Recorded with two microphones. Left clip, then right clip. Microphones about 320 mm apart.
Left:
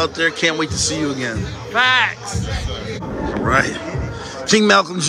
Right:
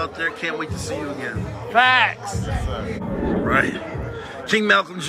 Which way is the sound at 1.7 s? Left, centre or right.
Right.